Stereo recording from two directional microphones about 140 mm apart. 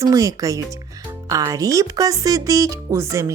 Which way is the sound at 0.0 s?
25° right (ahead or behind).